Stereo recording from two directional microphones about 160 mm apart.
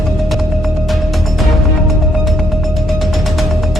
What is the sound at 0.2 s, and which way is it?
Music, centre (ahead or behind).